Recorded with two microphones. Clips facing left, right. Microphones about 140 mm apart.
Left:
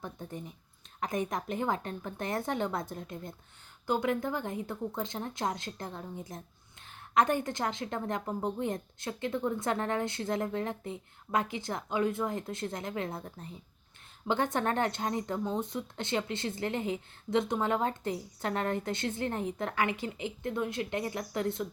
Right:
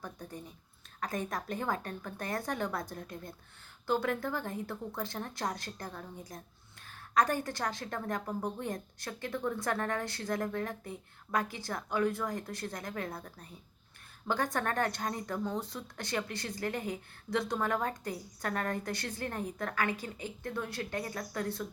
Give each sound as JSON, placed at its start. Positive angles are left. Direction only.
{"t": 0.0, "sound": "a woman's voice", "side_deg": 20}